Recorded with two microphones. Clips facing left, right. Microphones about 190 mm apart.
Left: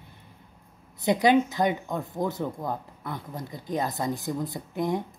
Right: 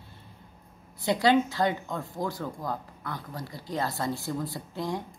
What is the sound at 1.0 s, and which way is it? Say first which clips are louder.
Speech: left 2 dB; 20° left (ahead or behind).